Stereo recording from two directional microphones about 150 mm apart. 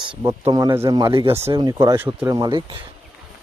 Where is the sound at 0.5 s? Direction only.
20° right (ahead or behind).